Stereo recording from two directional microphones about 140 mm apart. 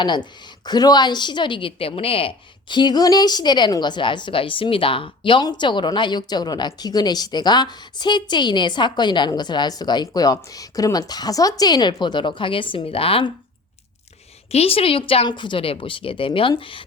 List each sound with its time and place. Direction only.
0.0 s a woman's voice: 30° left (ahead or behind)
14.5 s a woman's voice: 45° left (ahead or behind)